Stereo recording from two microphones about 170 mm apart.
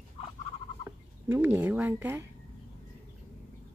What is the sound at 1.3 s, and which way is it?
Speech, 10° right (ahead or behind).